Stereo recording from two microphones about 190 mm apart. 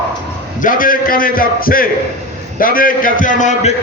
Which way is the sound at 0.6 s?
45° left (ahead or behind).